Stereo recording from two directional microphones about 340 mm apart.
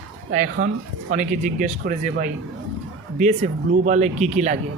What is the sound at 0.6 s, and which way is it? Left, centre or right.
Speech, right.